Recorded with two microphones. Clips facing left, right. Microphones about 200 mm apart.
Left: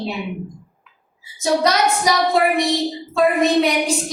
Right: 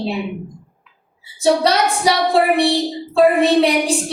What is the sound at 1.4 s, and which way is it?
A woman's voice, 30° right (ahead or behind).